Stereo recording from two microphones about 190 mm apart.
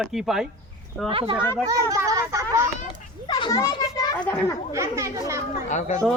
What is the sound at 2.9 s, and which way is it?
Children playing, 25° left (ahead or behind).